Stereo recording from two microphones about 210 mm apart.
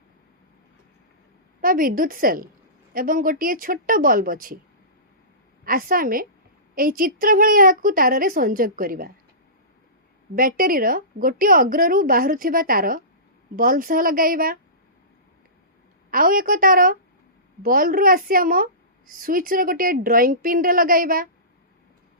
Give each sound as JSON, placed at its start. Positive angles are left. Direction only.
{"t": 1.6, "sound": "a woman's voice", "side_deg": -40}
{"t": 5.6, "sound": "a woman's voice", "side_deg": -40}
{"t": 10.3, "sound": "a woman's voice", "side_deg": -45}
{"t": 16.1, "sound": "a woman's voice", "side_deg": -40}